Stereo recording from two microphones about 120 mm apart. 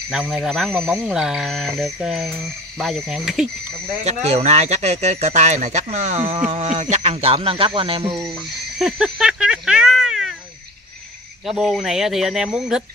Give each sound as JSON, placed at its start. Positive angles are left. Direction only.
{"t": 0.1, "sound": "speech", "side_deg": -5}
{"t": 4.0, "sound": "speech", "side_deg": -65}
{"t": 8.3, "sound": "speech", "side_deg": -5}
{"t": 11.4, "sound": "speech", "side_deg": 0}